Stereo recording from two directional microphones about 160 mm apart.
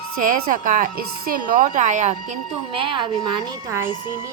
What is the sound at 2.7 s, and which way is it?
A woman's voice, 30° right (ahead or behind).